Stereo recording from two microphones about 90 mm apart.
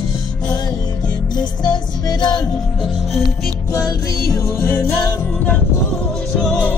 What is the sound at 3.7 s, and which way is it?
Music, 45° left (ahead or behind).